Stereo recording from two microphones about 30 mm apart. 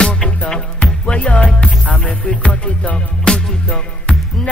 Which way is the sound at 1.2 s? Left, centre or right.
Left.